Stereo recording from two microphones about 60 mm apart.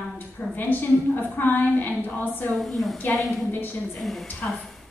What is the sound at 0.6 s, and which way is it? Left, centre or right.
A woman's voice, left.